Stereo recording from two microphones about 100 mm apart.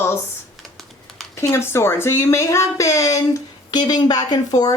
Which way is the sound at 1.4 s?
25° left (ahead or behind).